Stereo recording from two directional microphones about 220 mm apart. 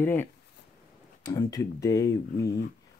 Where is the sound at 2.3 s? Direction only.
45° left (ahead or behind).